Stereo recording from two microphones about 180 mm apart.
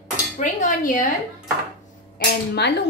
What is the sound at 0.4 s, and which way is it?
Dishes, 45° left (ahead or behind).